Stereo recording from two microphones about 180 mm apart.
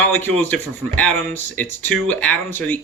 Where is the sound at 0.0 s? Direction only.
10° left (ahead or behind).